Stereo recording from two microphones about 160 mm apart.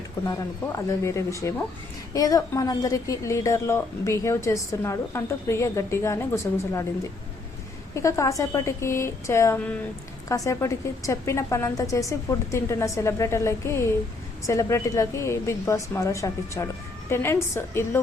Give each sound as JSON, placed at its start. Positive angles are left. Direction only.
{"t": 0.8, "sound": "a woman's voice", "side_deg": 20}
{"t": 7.9, "sound": "a woman's voice", "side_deg": 20}